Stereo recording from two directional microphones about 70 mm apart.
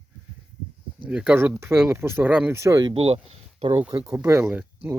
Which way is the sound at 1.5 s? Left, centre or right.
Right.